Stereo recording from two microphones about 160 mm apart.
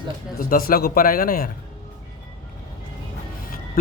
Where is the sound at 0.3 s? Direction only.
65° left (ahead or behind).